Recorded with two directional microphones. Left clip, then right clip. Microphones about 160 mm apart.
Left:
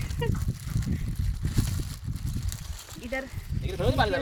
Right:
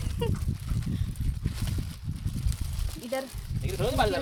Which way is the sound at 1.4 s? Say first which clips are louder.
Left 4 dB; 80° left.